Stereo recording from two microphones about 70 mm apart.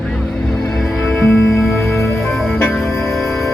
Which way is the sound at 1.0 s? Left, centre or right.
Centre.